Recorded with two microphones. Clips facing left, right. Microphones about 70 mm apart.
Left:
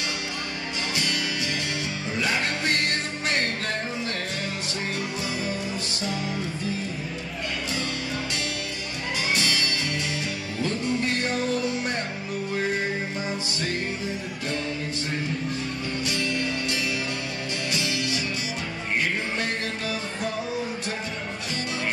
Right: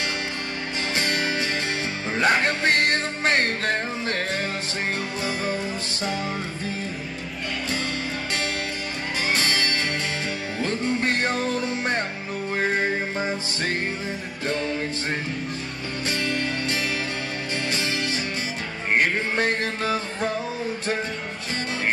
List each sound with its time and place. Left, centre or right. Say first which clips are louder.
0.9 s music: right 5 dB; right
5.2 s music: right 3 dB; right
9.3 s music: right 3 dB; right
16.1 s music: right 3 dB; right